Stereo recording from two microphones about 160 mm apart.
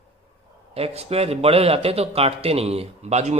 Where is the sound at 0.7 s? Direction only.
40° right (ahead or behind).